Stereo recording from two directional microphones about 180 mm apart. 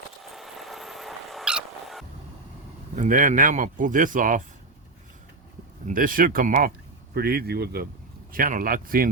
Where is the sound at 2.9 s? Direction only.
45° right (ahead or behind).